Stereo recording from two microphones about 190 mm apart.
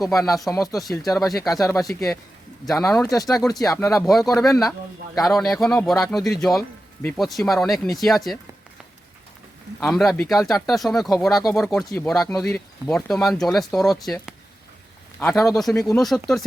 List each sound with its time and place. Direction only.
0.1 s speech: 20° left (ahead or behind)
0.9 s speech: centre (ahead or behind)
3.3 s speech: 20° left (ahead or behind)
4.0 s speech: centre (ahead or behind)
9.8 s speech: centre (ahead or behind)